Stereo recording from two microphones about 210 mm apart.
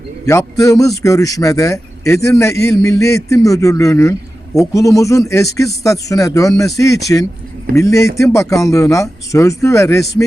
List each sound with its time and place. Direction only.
0.3 s a man's voice: 15° left (ahead or behind)